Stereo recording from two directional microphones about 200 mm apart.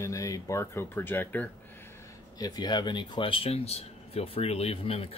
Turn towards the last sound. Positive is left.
turn(degrees=30)  # may be behind; listen again after turning